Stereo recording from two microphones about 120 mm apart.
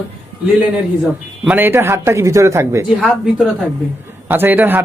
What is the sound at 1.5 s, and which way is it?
A man's voice, 15° right (ahead or behind).